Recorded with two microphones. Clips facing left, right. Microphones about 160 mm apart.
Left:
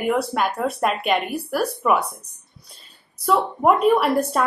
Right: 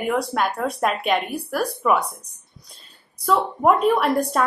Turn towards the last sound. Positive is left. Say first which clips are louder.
# left 1 dB
turn(degrees=5)  # may be behind; listen again after turning